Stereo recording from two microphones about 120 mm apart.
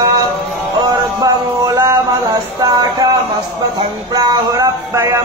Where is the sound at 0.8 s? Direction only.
35° right (ahead or behind).